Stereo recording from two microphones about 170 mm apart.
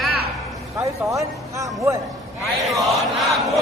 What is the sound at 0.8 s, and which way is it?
Speech, 20° right (ahead or behind).